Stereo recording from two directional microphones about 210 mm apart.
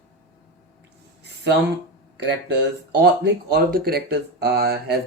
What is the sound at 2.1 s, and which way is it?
Speech, 55° right (ahead or behind).